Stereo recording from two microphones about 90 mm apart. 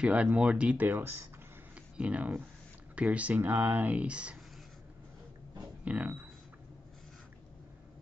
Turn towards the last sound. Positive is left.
turn(degrees=-15)  # may be behind; listen again after turning